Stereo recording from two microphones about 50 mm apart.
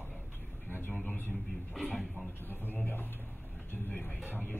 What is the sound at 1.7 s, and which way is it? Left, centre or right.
Speech, centre.